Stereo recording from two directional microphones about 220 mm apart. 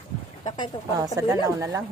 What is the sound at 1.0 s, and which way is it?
Speech, 15° right (ahead or behind).